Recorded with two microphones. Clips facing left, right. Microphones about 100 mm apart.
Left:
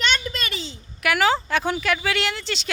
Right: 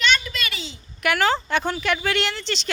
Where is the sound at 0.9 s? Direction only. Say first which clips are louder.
Left 1 dB; 5° left (ahead or behind).